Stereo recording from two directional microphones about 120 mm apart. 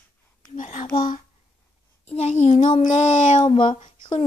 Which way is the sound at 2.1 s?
70° left (ahead or behind).